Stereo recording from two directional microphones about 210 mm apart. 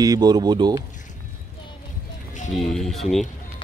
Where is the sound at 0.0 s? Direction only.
20° right (ahead or behind).